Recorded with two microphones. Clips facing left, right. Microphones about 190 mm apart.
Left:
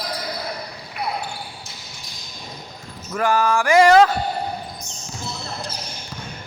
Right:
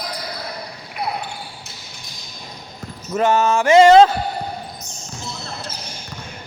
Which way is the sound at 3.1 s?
25° right (ahead or behind).